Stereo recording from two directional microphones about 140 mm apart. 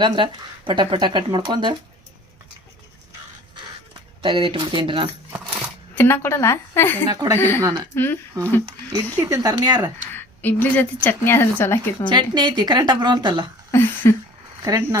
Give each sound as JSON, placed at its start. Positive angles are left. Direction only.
{"t": 0.0, "sound": "speech", "side_deg": -35}
{"t": 4.2, "sound": "speech", "side_deg": -35}
{"t": 5.9, "sound": "a woman's voice", "side_deg": 15}
{"t": 7.1, "sound": "speech", "side_deg": -25}
{"t": 7.3, "sound": "a woman's voice", "side_deg": 15}
{"t": 7.6, "sound": "speech", "side_deg": -30}
{"t": 7.9, "sound": "a woman's voice", "side_deg": 15}
{"t": 9.1, "sound": "speech", "side_deg": -25}
{"t": 10.2, "sound": "a woman's voice", "side_deg": 15}
{"t": 12.1, "sound": "speech", "side_deg": -30}
{"t": 13.7, "sound": "a sound", "side_deg": 15}
{"t": 14.6, "sound": "speech", "side_deg": -20}